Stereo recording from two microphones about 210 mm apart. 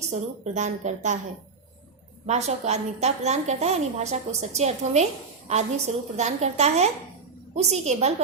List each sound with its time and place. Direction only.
0.1 s a woman's voice: 35° right (ahead or behind)
2.2 s a woman's voice: 30° right (ahead or behind)